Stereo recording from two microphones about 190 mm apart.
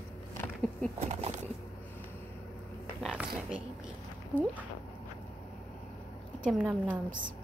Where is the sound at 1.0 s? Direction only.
35° right (ahead or behind).